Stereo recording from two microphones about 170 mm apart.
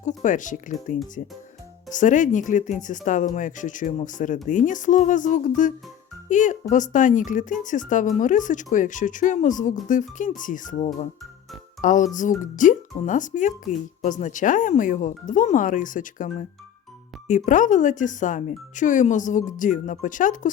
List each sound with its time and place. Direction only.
0.0 s speech: 45° left (ahead or behind)